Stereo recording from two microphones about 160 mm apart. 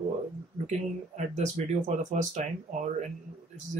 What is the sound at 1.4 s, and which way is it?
Speech, 50° right (ahead or behind).